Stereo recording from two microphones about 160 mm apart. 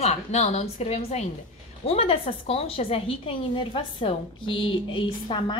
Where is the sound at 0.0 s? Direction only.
45° left (ahead or behind).